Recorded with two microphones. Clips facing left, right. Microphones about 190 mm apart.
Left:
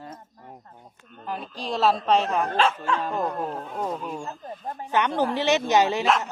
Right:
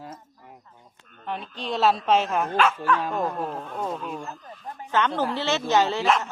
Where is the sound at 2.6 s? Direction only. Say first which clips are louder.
Right 3 dB; 30° left (ahead or behind).